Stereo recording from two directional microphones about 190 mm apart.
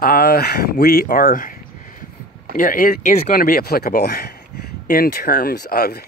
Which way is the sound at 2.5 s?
45° left (ahead or behind).